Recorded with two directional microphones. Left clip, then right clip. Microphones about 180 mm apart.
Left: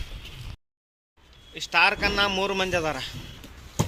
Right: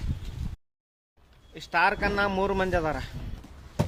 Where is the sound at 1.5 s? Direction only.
50° right (ahead or behind).